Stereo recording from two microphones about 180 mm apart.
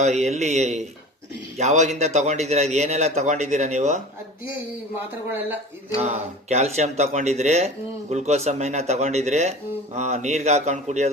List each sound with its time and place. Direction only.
0.0 s speech: 40° right (ahead or behind)
5.9 s speech: 40° right (ahead or behind)